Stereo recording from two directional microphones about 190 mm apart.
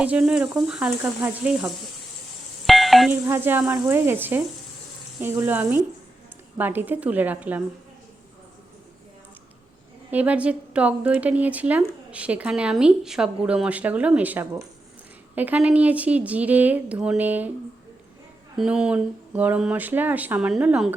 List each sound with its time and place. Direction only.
0.0 s sizzle: 5° right (ahead or behind)
3.2 s a woman's voice: 10° right (ahead or behind)
10.1 s a woman's voice: 10° right (ahead or behind)
18.5 s a woman's voice: 5° right (ahead or behind)